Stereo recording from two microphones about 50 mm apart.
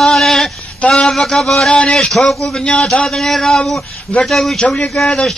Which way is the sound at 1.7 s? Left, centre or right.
Centre.